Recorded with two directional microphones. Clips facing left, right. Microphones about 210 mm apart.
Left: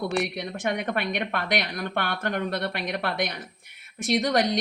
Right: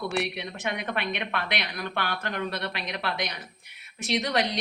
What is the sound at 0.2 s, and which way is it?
A woman's voice, 45° left (ahead or behind).